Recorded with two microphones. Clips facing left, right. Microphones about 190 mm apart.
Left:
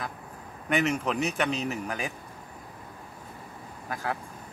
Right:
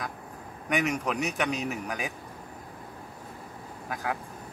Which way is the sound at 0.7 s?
Centre (ahead or behind).